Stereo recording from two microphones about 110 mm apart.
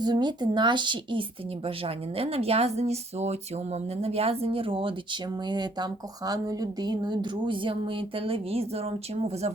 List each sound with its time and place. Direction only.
0.0 s speech: 40° right (ahead or behind)
1.6 s speech: 60° right (ahead or behind)
5.5 s speech: 40° right (ahead or behind); by 9.5 s 65° right (ahead or behind)